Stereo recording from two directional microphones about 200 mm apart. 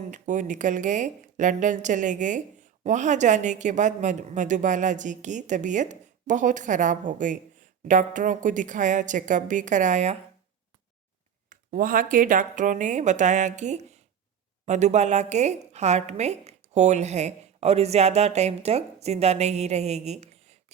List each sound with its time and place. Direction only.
0.1 s a woman's voice: 40° right (ahead or behind)
11.4 s a woman's voice: 45° right (ahead or behind)